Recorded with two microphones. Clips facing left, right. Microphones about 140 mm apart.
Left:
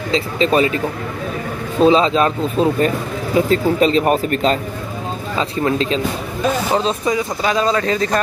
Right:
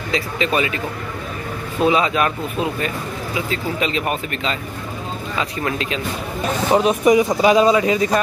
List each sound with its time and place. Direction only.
0.1 s speech: 35° left (ahead or behind)
1.8 s speech: 30° left (ahead or behind)
3.3 s speech: 40° left (ahead or behind)
5.4 s speech: 30° left (ahead or behind)
6.7 s speech: 15° right (ahead or behind)